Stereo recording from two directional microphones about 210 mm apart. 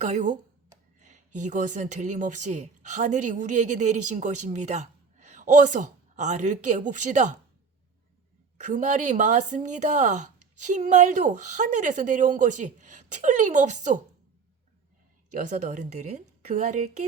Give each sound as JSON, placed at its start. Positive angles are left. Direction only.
{"t": 0.0, "sound": "a woman's voice", "side_deg": -35}
{"t": 0.9, "sound": "a sound", "side_deg": -35}
{"t": 1.4, "sound": "a woman's voice", "side_deg": -35}
{"t": 8.5, "sound": "a woman's voice", "side_deg": -35}
{"t": 15.3, "sound": "a woman's voice", "side_deg": -35}